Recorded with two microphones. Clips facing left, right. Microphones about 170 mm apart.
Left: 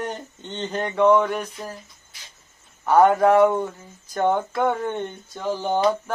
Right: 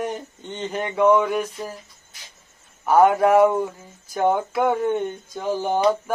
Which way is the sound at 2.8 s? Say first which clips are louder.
Even; 10° right (ahead or behind).